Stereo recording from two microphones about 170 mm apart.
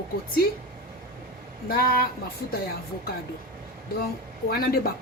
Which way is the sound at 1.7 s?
65° left (ahead or behind).